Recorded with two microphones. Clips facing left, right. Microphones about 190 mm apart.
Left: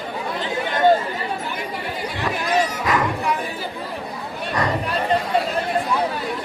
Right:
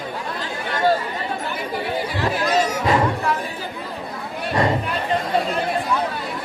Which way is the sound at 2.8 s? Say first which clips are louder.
Right 3 dB; 30° right (ahead or behind).